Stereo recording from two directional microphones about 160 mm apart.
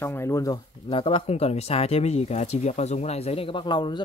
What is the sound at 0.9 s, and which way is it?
Speech, 35° left (ahead or behind).